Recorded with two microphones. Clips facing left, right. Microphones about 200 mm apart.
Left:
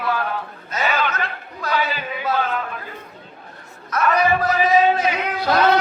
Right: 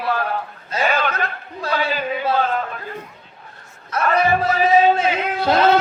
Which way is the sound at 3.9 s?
30° right (ahead or behind).